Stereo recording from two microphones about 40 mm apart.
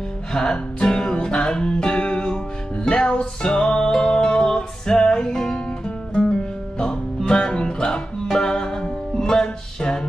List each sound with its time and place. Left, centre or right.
0.3 s music: centre
7.2 s music: centre